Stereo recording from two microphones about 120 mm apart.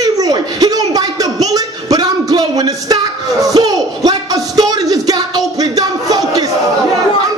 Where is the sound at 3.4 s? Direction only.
30° right (ahead or behind).